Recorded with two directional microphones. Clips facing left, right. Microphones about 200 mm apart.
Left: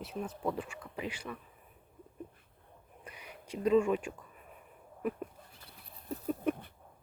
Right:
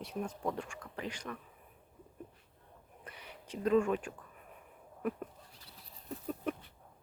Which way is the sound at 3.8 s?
10° left (ahead or behind).